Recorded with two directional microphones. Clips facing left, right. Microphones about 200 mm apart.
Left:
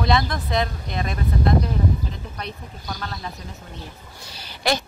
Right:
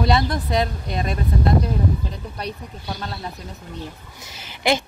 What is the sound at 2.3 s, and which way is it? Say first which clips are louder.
Speech: right 3 dB; 25° right (ahead or behind).